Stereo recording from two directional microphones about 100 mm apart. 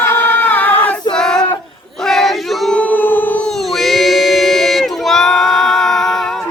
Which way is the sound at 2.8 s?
15° left (ahead or behind).